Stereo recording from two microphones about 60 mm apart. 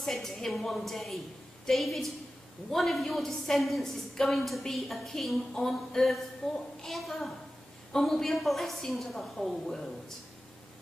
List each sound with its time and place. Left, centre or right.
0.0 s a woman's voice: centre